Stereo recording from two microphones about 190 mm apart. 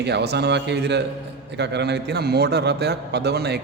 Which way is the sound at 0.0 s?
60° right (ahead or behind).